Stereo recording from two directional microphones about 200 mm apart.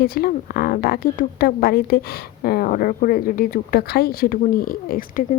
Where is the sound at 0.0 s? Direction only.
50° left (ahead or behind).